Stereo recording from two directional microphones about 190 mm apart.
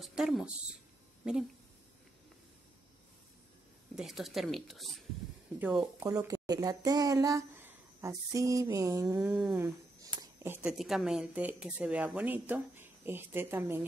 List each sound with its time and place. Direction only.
0.0 s speech: centre (ahead or behind)
3.9 s speech: centre (ahead or behind)
6.0 s speech: 20° right (ahead or behind)
9.2 s speech: 5° right (ahead or behind)